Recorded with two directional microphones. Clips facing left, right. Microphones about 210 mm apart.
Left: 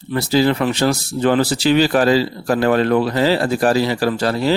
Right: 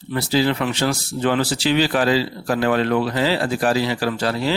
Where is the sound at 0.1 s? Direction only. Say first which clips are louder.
Left 3 dB; 40° left (ahead or behind).